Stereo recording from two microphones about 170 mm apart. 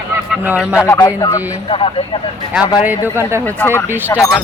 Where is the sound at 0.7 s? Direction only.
15° left (ahead or behind).